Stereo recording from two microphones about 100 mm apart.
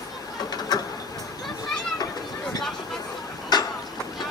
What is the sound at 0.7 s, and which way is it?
Vehicle, 40° left (ahead or behind).